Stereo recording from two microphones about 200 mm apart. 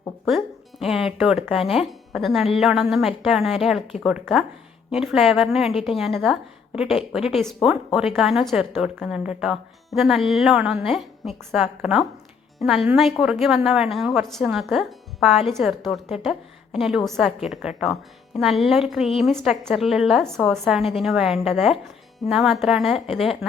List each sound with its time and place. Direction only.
0.3 s a woman's voice: centre (ahead or behind)